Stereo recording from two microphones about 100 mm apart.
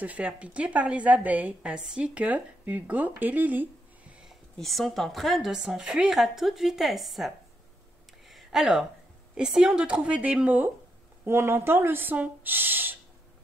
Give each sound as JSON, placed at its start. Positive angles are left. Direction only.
{"t": 0.0, "sound": "a woman's voice", "side_deg": -15}
{"t": 4.6, "sound": "a woman's voice", "side_deg": 0}
{"t": 8.3, "sound": "a sound", "side_deg": -5}
{"t": 9.4, "sound": "a woman's voice", "side_deg": -5}